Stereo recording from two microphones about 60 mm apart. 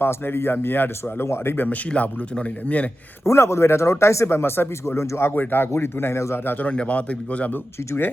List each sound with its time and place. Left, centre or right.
0.0 s speech: left
1.9 s a man's voice: centre
3.2 s speech: left
6.7 s a man's voice: left